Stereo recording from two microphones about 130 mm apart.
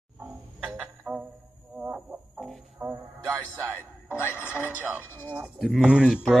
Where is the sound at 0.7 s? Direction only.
5° right (ahead or behind).